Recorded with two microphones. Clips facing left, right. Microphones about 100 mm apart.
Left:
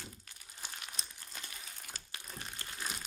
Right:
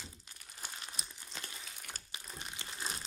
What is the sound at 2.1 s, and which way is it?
Crumpling, 20° right (ahead or behind).